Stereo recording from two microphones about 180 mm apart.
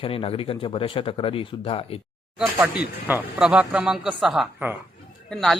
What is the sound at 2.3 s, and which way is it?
A woman's voice, 5° right (ahead or behind).